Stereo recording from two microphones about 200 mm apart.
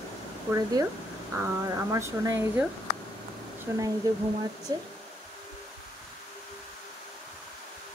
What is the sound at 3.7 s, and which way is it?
Speech, 15° right (ahead or behind).